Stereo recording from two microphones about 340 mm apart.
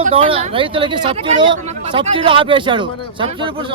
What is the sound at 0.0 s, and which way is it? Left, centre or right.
Speech, centre.